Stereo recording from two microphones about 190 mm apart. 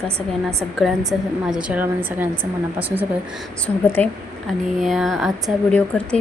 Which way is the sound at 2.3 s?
25° right (ahead or behind).